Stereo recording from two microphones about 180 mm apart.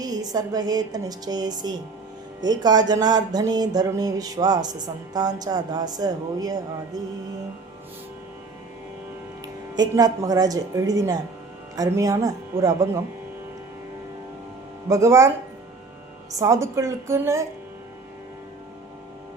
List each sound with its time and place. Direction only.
0.0 s music: 20° right (ahead or behind)
9.7 s music: 20° right (ahead or behind)
14.8 s a woman's voice: 15° right (ahead or behind)
16.4 s a woman's voice: 15° right (ahead or behind)